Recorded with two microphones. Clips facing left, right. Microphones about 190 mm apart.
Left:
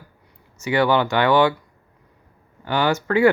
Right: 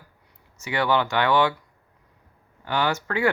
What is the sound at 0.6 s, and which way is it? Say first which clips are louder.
Speech: left 5 dB; 5° left (ahead or behind).